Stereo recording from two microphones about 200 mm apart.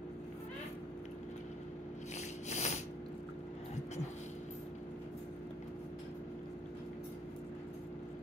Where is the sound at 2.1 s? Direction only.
35° left (ahead or behind).